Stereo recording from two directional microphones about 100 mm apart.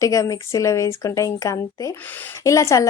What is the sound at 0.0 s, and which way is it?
A woman's voice, 35° left (ahead or behind).